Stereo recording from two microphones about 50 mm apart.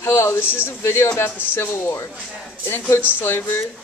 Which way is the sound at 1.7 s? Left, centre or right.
Left.